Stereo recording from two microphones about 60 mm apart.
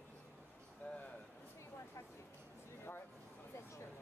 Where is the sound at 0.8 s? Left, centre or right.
Left.